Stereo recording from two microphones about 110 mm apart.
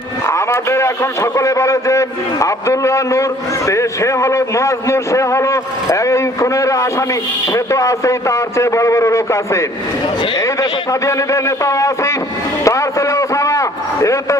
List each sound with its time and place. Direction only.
0.3 s a man's voice: 25° left (ahead or behind)